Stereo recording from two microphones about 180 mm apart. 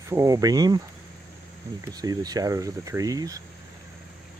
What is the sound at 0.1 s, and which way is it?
Speech, 20° right (ahead or behind).